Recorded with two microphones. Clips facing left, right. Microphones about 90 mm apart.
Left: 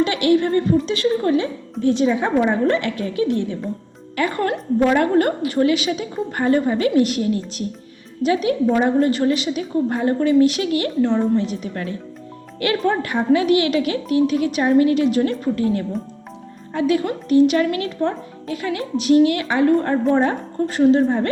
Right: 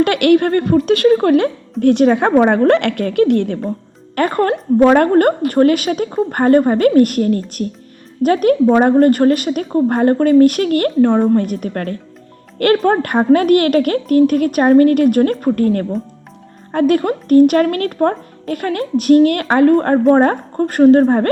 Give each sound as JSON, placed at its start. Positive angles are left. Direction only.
{"t": 0.0, "sound": "a woman's voice", "side_deg": -60}
{"t": 4.1, "sound": "speech", "side_deg": -50}